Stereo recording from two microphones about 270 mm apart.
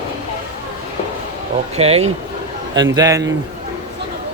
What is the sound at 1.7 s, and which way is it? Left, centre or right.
A man's voice, right.